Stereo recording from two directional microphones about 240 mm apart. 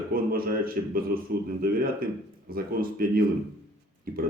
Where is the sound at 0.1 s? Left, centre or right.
Right.